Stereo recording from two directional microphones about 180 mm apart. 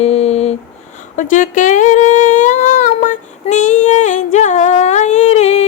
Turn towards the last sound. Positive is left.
turn(degrees=40)  # may be behind; listen again after turning